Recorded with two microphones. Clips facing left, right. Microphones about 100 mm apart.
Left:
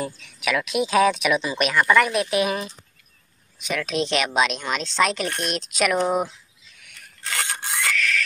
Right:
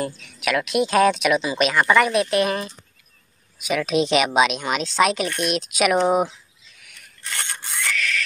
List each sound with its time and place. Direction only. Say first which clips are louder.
0.0 s speech: right 2 dB; centre (ahead or behind)
3.5 s speech: right 4 dB; 5° right (ahead or behind)
7.2 s a sound: left 3 dB; 90° left
7.9 s owl: even; centre (ahead or behind)